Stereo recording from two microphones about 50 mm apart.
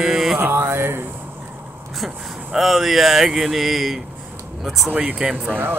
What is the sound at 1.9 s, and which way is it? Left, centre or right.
Speech, centre.